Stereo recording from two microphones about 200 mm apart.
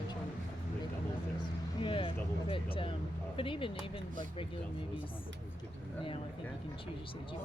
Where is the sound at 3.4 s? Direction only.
25° left (ahead or behind).